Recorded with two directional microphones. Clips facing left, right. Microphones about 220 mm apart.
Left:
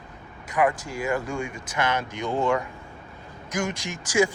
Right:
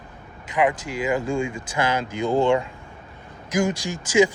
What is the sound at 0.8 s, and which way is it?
Speech, 90° right.